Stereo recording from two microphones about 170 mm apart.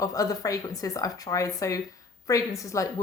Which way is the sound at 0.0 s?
20° left (ahead or behind).